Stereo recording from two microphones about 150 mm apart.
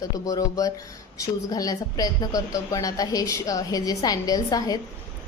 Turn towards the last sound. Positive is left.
turn(degrees=25)  # may be behind; listen again after turning